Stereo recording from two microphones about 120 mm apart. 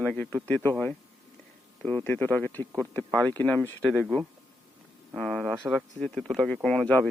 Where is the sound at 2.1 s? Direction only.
15° left (ahead or behind).